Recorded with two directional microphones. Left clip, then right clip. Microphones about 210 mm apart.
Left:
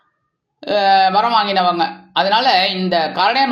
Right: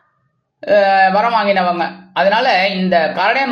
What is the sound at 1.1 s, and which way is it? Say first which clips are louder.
A man's voice: right 1 dB; 30° left (ahead or behind).